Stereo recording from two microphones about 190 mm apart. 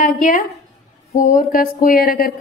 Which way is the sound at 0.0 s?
45° left (ahead or behind).